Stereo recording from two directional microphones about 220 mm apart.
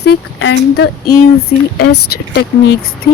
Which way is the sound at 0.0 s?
50° left (ahead or behind).